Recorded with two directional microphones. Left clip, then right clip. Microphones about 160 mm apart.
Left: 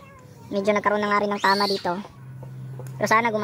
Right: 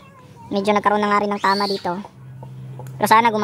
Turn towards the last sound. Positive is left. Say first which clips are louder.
# right 6 dB
turn(degrees=-15)  # may be behind; listen again after turning